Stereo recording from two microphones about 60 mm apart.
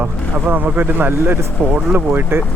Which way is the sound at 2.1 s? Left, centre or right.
Right.